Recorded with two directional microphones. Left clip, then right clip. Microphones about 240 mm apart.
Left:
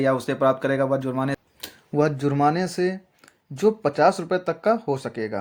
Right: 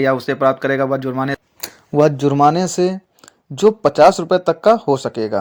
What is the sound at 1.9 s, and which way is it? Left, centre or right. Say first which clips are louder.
Speech: right 8 dB; right.